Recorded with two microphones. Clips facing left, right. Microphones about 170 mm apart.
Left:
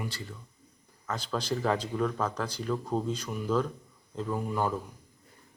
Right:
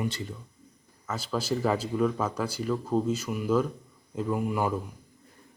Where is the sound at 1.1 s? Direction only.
5° right (ahead or behind).